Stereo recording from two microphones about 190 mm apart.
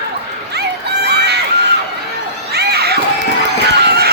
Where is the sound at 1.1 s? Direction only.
60° right (ahead or behind).